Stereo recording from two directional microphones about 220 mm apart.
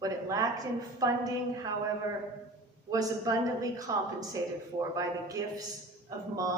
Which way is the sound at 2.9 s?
15° right (ahead or behind).